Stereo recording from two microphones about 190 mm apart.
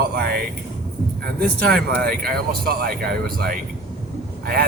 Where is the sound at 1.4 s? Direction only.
55° right (ahead or behind).